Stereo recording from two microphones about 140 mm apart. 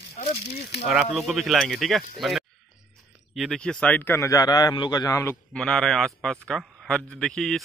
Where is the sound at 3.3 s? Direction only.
Centre (ahead or behind); by 5.4 s 20° left (ahead or behind).